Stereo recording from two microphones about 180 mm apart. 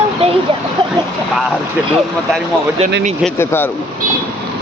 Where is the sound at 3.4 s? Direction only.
10° left (ahead or behind).